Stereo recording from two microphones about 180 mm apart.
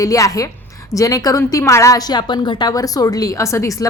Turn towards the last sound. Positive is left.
turn(degrees=15)  # may be behind; listen again after turning